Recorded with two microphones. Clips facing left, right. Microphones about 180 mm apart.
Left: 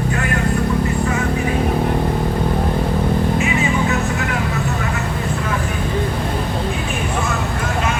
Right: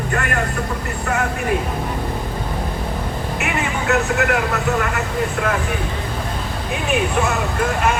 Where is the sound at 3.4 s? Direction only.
70° right (ahead or behind).